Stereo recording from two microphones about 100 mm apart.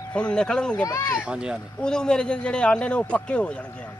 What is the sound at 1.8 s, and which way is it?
Speech, 10° left (ahead or behind).